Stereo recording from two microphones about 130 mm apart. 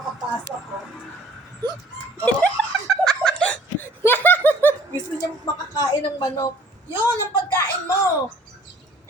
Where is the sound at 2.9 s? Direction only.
5° left (ahead or behind).